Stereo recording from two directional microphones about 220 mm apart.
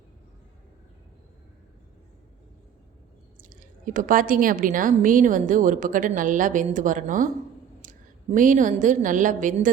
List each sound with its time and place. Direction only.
3.6 s a woman's voice: 35° right (ahead or behind)